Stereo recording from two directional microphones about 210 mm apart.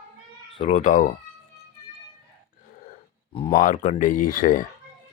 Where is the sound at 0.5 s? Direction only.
30° left (ahead or behind).